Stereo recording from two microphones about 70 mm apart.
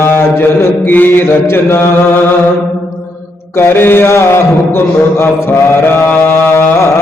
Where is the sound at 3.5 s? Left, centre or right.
Left.